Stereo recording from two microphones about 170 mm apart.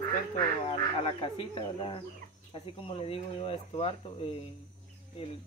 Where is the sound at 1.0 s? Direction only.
30° left (ahead or behind).